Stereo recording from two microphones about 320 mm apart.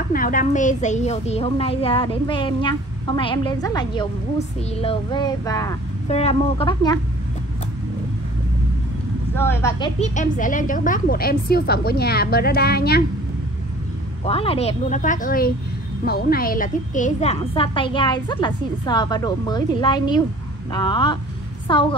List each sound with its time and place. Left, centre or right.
0.1 s a woman's voice: left
9.3 s a woman's voice: centre
9.9 s a woman's voice: left
14.2 s a woman's voice: centre